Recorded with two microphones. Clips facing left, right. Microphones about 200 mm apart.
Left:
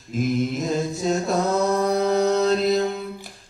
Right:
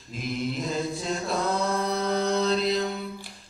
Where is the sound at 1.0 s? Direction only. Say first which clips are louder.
Left 7 dB; 45° left (ahead or behind).